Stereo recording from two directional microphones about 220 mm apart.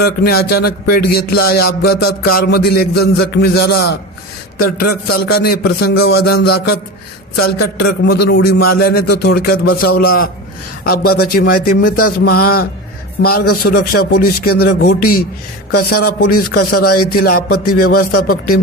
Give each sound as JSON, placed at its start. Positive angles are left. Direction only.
{"t": 0.0, "sound": "a man's voice", "side_deg": 45}
{"t": 7.9, "sound": "a man's voice", "side_deg": 45}
{"t": 11.9, "sound": "a man's voice", "side_deg": 90}
{"t": 12.1, "sound": "a man's voice", "side_deg": 45}
{"t": 13.4, "sound": "a man's voice", "side_deg": 90}
{"t": 13.7, "sound": "a man's voice", "side_deg": 45}
{"t": 16.9, "sound": "a man's voice", "side_deg": 90}
{"t": 17.7, "sound": "speech", "side_deg": 40}